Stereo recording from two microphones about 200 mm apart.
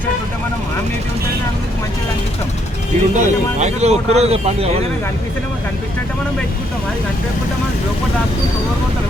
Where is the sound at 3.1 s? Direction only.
35° right (ahead or behind).